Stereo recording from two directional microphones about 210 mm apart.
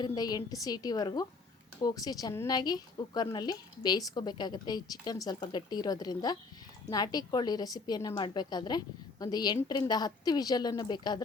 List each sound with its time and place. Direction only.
0.0 s a woman's voice: 20° left (ahead or behind)